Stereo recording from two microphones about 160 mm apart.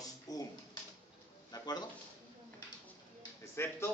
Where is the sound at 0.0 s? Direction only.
25° left (ahead or behind).